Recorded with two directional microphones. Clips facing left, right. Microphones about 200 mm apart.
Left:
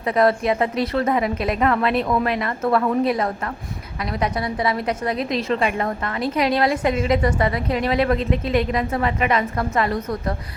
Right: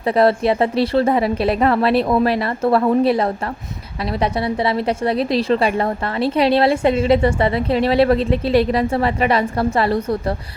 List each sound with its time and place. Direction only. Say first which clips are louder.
0.0 s a woman's voice: right 3 dB; 30° right (ahead or behind)